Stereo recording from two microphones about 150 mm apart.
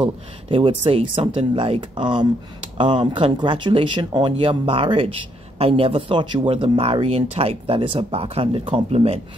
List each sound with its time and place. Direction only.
0.0 s speech: 35° right (ahead or behind)